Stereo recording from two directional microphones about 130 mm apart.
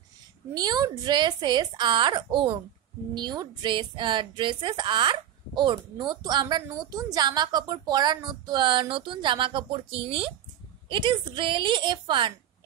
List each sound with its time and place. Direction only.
0.6 s a woman's voice: 30° right (ahead or behind)